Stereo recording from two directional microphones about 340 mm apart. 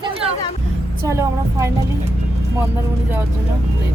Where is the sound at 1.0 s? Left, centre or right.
Centre.